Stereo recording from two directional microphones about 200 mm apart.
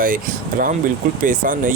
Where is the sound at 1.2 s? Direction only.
40° right (ahead or behind).